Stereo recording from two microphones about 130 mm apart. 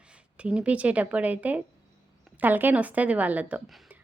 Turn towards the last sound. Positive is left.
turn(degrees=-10)  # may be behind; listen again after turning